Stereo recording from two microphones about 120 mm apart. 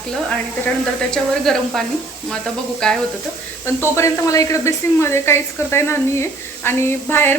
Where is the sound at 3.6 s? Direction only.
25° left (ahead or behind).